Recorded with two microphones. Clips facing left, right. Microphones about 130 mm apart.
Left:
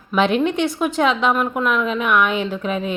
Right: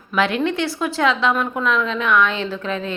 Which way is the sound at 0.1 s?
20° left (ahead or behind).